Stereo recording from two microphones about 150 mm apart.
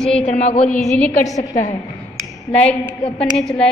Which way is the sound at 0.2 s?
50° left (ahead or behind).